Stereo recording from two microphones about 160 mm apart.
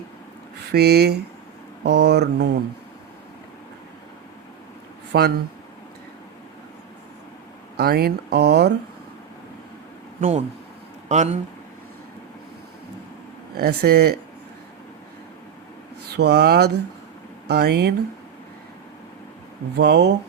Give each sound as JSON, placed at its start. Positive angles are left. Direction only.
{"t": 0.7, "sound": "speech", "side_deg": -85}
{"t": 5.1, "sound": "speech", "side_deg": -90}
{"t": 7.8, "sound": "speech", "side_deg": -75}
{"t": 10.2, "sound": "speech", "side_deg": -50}
{"t": 13.6, "sound": "speech", "side_deg": -80}
{"t": 16.0, "sound": "speech", "side_deg": -90}
{"t": 19.7, "sound": "speech", "side_deg": -90}